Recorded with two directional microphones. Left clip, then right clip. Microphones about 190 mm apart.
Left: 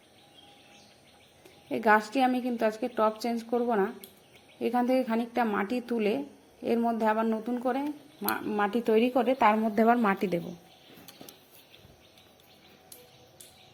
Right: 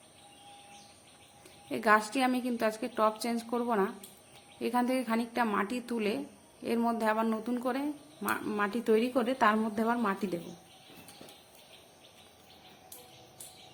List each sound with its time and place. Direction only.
1.7 s speech: centre (ahead or behind)
9.7 s a woman's voice: 25° left (ahead or behind)